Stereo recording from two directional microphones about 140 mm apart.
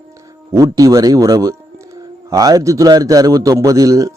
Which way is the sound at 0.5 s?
25° right (ahead or behind).